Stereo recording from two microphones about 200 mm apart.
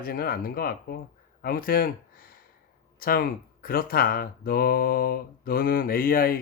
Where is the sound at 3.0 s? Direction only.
50° left (ahead or behind).